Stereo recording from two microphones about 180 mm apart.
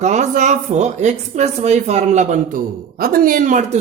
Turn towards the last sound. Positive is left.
turn(degrees=-45)  # may be behind; listen again after turning